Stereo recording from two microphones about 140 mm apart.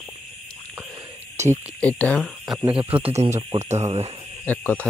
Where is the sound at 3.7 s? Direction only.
50° right (ahead or behind).